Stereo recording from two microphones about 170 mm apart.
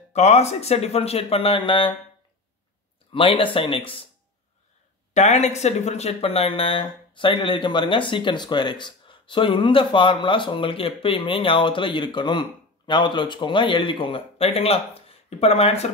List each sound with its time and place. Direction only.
0.1 s speech: 40° left (ahead or behind)
3.1 s speech: 30° left (ahead or behind)
5.1 s speech: 45° left (ahead or behind)